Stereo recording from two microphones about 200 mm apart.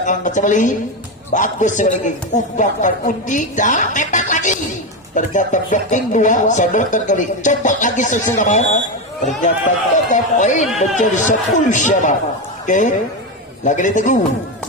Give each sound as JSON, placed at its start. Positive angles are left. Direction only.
{"t": 0.0, "sound": "speech", "side_deg": 40}